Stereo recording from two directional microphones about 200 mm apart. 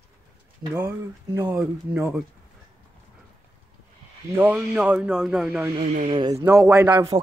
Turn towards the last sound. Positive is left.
turn(degrees=-20)  # may be behind; listen again after turning